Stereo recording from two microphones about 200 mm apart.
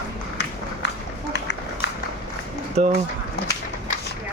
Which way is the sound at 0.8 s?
55° left (ahead or behind).